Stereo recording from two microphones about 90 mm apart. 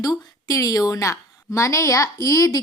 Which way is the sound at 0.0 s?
45° left (ahead or behind).